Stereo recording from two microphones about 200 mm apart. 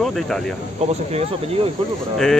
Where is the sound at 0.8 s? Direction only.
35° right (ahead or behind).